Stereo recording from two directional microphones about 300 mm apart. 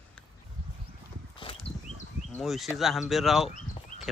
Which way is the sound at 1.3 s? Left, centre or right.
Centre.